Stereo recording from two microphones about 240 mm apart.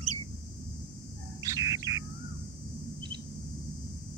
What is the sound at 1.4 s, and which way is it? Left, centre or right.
Bird, centre.